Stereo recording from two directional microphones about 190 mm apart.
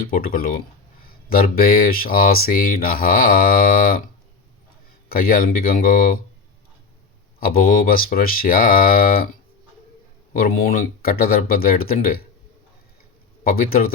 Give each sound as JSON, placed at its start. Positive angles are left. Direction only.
{"t": 0.0, "sound": "speech", "side_deg": 50}
{"t": 5.0, "sound": "speech", "side_deg": 50}
{"t": 7.3, "sound": "speech", "side_deg": 50}
{"t": 10.4, "sound": "speech", "side_deg": 50}
{"t": 13.4, "sound": "speech", "side_deg": 50}